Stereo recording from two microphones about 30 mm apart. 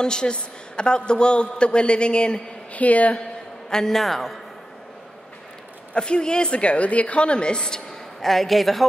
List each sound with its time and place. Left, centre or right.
0.0 s a man's voice: left
2.7 s speech: left
3.7 s a man's voice: centre
4.0 s a woman's voice: centre
5.9 s a man's voice: left
8.2 s a woman's voice: centre